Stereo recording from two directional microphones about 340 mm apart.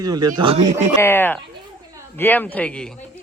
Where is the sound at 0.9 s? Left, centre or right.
Centre.